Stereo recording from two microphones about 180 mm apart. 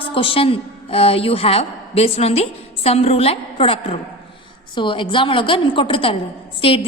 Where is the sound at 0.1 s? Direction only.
30° left (ahead or behind).